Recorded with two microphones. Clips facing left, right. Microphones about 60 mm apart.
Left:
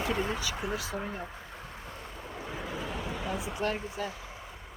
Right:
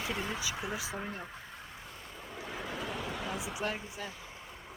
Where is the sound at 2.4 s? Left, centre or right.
Centre.